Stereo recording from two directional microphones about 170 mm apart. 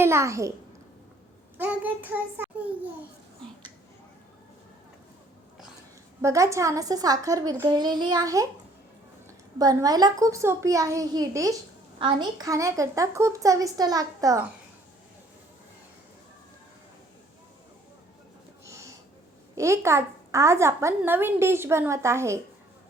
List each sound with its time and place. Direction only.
0.0 s a child's voice: 15° right (ahead or behind)
1.5 s a child's voice: 10° right (ahead or behind)
6.2 s a woman's voice: 15° right (ahead or behind)
9.6 s a woman's voice: 20° right (ahead or behind)
19.5 s a child's voice: 15° right (ahead or behind)